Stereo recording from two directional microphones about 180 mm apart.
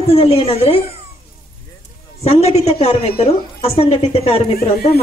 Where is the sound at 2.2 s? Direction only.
35° left (ahead or behind).